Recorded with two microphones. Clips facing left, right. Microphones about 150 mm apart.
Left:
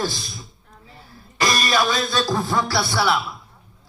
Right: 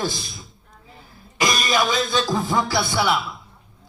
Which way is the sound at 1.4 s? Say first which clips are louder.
Even; 15° right (ahead or behind).